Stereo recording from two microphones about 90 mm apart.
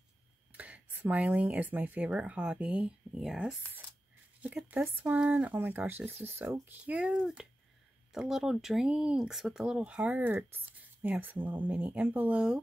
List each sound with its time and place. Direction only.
0.5 s speech: 15° right (ahead or behind)